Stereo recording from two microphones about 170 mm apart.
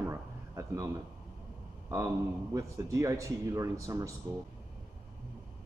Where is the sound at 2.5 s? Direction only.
20° right (ahead or behind).